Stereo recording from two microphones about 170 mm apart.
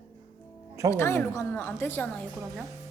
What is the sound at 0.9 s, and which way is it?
A woman's voice, 15° left (ahead or behind).